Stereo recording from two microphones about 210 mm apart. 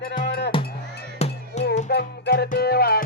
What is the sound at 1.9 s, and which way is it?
Music, 50° left (ahead or behind).